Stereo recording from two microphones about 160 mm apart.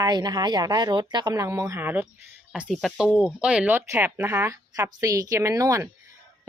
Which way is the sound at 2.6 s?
Centre (ahead or behind).